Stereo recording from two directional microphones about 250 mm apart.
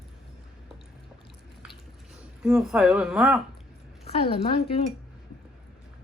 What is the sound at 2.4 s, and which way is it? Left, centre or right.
Speech, centre.